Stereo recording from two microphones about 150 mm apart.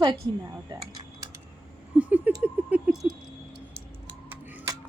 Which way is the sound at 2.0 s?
10° right (ahead or behind).